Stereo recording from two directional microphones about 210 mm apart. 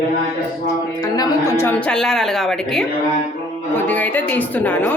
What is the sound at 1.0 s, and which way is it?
A woman's voice, 15° left (ahead or behind).